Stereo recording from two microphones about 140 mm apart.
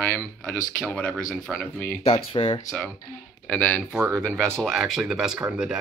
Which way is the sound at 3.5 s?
10° left (ahead or behind).